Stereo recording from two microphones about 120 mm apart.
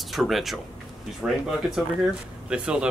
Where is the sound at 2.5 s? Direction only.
5° right (ahead or behind).